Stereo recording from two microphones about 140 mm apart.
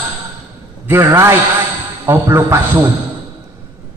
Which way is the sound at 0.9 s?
20° right (ahead or behind).